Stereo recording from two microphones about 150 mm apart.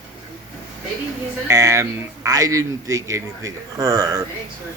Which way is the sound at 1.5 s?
20° right (ahead or behind).